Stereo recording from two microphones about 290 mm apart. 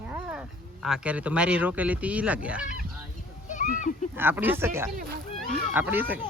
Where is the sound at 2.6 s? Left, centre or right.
Left.